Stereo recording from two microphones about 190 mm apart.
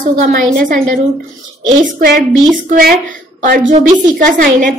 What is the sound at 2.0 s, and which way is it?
A woman's voice, 50° right (ahead or behind).